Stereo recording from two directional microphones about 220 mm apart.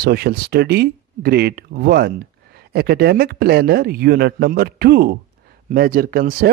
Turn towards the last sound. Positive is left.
turn(degrees=-40)  # may be behind; listen again after turning